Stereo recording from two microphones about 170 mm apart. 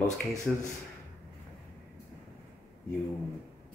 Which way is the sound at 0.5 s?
5° right (ahead or behind).